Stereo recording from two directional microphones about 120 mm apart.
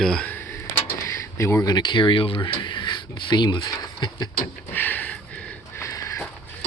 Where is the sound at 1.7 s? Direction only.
40° left (ahead or behind).